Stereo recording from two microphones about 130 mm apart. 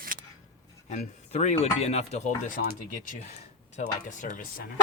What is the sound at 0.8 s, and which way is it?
Speech, 65° left (ahead or behind).